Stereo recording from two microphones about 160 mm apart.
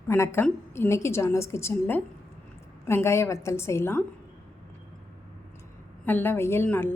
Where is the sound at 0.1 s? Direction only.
15° left (ahead or behind).